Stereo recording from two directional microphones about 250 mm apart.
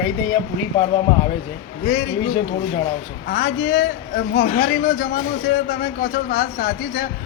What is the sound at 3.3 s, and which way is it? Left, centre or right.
A man's voice, left.